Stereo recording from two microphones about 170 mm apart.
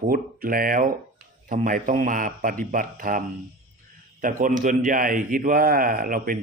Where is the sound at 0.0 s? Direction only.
55° right (ahead or behind).